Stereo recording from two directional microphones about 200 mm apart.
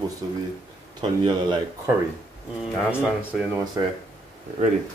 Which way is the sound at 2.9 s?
5° right (ahead or behind).